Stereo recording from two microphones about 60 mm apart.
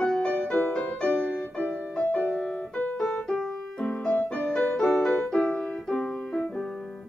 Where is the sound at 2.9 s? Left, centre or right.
Centre.